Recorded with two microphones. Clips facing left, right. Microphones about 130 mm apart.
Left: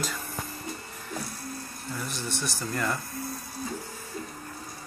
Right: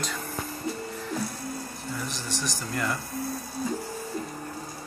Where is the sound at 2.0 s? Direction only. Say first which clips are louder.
Even; 50° left (ahead or behind).